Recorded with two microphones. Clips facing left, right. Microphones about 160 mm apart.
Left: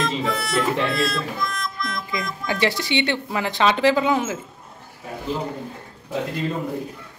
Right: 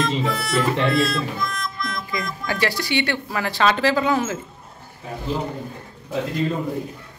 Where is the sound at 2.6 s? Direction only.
20° left (ahead or behind).